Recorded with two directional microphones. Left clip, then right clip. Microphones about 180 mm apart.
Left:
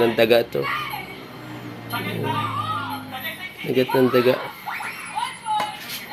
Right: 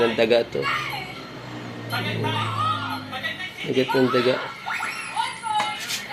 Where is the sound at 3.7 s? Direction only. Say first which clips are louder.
Left 2 dB; 45° left (ahead or behind).